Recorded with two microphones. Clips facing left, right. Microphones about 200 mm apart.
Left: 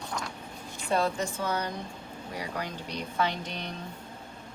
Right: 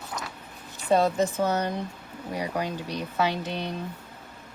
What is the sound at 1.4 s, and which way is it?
Speech, 45° right (ahead or behind).